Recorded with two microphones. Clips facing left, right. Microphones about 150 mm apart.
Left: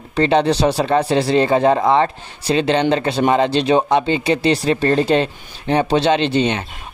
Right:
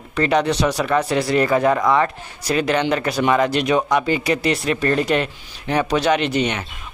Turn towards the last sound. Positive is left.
turn(degrees=30)  # may be behind; listen again after turning